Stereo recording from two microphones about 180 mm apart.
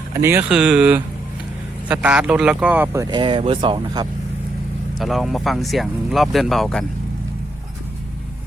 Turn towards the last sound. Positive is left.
turn(degrees=0)  # may be behind; listen again after turning